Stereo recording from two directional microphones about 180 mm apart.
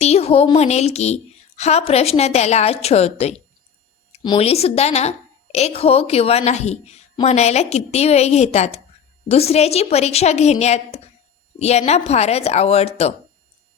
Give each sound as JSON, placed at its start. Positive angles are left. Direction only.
{"t": 0.0, "sound": "a woman's voice", "side_deg": 35}